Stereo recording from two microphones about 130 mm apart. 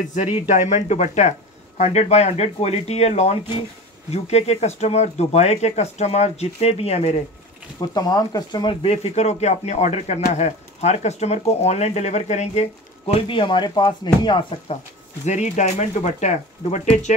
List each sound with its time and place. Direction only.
0.1 s speech: 65° left (ahead or behind)
7.9 s speech: 30° left (ahead or behind)
8.9 s speech: 55° left (ahead or behind); by 14.4 s 35° left (ahead or behind)
15.2 s speech: 60° left (ahead or behind)